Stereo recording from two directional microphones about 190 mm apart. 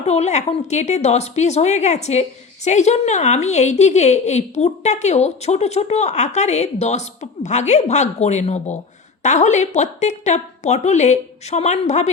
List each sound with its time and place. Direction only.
0.0 s a woman's voice: 35° left (ahead or behind)